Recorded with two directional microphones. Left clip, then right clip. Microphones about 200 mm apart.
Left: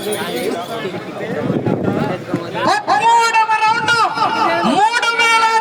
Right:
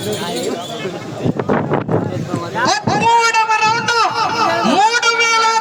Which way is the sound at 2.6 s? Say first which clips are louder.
Left 1 dB; 55° left (ahead or behind).